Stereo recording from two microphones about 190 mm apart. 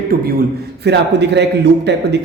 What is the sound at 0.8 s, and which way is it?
Speech, 65° right (ahead or behind).